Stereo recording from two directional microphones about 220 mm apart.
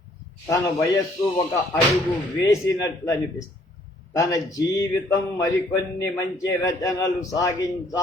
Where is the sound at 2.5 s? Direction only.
15° left (ahead or behind).